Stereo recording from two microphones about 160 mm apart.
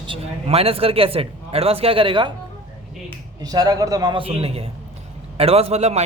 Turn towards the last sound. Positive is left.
turn(degrees=-40)  # may be behind; listen again after turning